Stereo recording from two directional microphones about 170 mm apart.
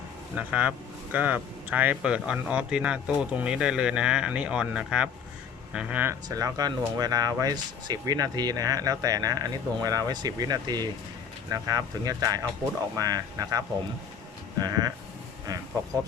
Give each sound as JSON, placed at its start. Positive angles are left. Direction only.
{"t": 0.3, "sound": "speech", "side_deg": -10}
{"t": 6.2, "sound": "speech", "side_deg": -20}